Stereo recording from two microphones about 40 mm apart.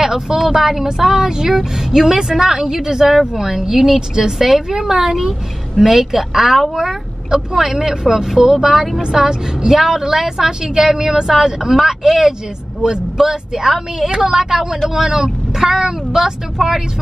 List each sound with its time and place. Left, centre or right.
0.0 s speech: centre
6.8 s a sound: centre
7.5 s speech: centre
9.0 s speech: centre